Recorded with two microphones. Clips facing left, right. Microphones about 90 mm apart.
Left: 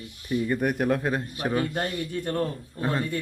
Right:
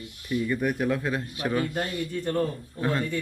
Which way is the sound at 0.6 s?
55° left (ahead or behind).